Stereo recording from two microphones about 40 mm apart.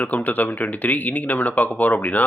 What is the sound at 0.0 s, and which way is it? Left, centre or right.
Speech, left.